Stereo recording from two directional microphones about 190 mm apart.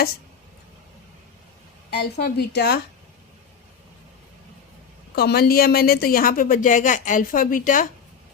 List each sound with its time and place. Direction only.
1.9 s a woman's voice: 60° left (ahead or behind)
5.1 s a woman's voice: 55° left (ahead or behind)